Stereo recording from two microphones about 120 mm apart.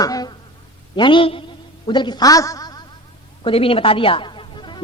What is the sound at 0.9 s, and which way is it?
A man's voice, 40° left (ahead or behind).